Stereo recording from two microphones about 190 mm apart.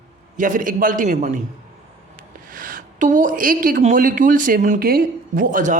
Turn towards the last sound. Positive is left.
turn(degrees=-40)  # may be behind; listen again after turning